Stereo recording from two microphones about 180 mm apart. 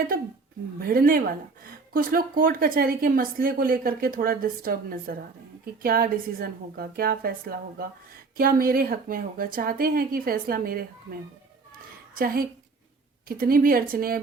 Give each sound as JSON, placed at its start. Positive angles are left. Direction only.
{"t": 0.8, "sound": "speech", "side_deg": -55}
{"t": 12.2, "sound": "speech", "side_deg": -55}